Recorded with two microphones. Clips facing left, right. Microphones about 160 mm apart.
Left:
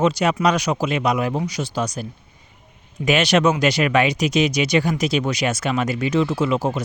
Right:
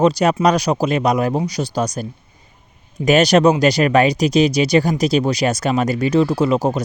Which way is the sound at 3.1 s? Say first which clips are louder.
Right 5 dB; 40° right (ahead or behind).